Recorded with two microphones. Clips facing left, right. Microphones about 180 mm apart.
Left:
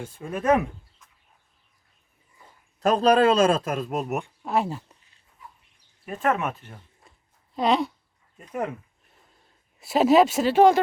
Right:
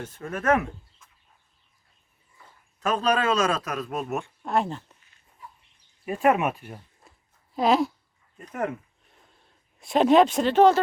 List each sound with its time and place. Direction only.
0.0 s speech: 10° left (ahead or behind)
2.8 s a man's voice: 35° left (ahead or behind)
4.0 s speech: 15° left (ahead or behind)
4.4 s speech: 5° left (ahead or behind)
6.1 s speech: 15° right (ahead or behind)
9.8 s speech: 5° left (ahead or behind)